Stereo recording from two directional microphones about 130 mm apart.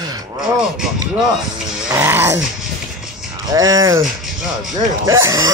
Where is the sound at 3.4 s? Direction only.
25° right (ahead or behind).